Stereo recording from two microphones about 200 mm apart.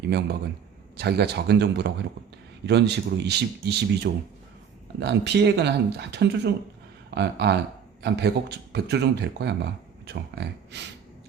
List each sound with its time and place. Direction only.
0.1 s speech: 55° right (ahead or behind)